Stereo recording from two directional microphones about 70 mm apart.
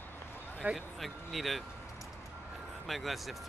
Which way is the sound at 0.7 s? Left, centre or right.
Centre.